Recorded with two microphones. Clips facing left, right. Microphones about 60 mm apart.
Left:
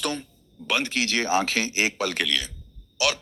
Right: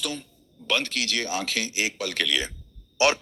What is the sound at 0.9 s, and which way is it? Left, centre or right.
Speech, left.